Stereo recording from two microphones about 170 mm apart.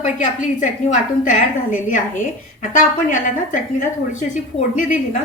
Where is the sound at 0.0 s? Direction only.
45° left (ahead or behind).